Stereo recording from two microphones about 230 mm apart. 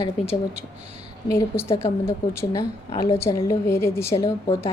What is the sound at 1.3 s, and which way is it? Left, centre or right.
A woman's voice, centre.